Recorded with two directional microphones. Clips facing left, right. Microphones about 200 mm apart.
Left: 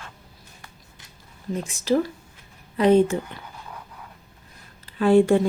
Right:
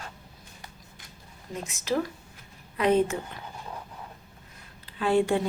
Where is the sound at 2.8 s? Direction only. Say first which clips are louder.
Left 6 dB; 30° left (ahead or behind).